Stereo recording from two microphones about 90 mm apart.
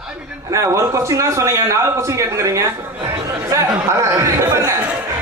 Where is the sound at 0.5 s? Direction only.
30° right (ahead or behind).